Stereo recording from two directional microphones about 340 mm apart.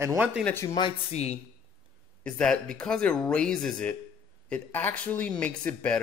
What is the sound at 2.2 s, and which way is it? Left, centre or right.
Speech, centre.